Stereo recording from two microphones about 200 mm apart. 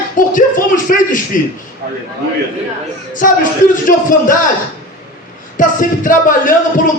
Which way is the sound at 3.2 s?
45° left (ahead or behind).